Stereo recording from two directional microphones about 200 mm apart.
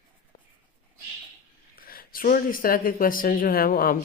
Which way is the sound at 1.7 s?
45° left (ahead or behind).